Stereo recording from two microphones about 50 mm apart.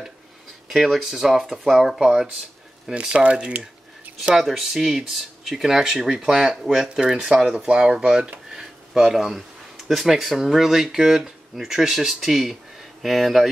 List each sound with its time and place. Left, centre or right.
0.7 s speech: centre
2.9 s speech: right
4.4 s speech: centre
7.4 s speech: centre
8.5 s speech: centre